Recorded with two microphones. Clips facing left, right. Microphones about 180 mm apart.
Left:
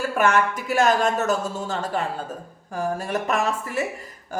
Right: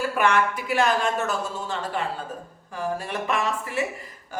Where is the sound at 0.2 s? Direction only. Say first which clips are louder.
Left 2 dB; 45° left (ahead or behind).